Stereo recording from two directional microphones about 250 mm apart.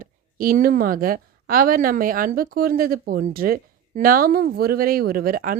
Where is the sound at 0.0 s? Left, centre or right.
Right.